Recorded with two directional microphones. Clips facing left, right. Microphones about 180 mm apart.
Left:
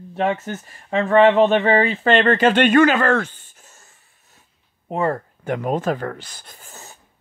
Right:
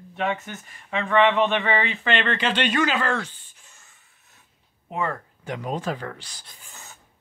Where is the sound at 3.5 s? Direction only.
45° left (ahead or behind).